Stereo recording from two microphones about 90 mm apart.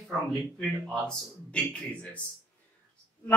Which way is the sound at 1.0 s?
10° left (ahead or behind).